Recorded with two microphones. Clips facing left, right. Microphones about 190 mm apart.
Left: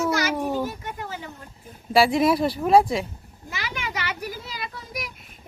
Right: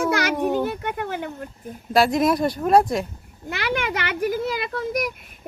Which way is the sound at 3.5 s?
60° right (ahead or behind).